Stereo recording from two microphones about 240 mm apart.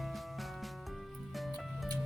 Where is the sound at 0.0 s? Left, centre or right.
Centre.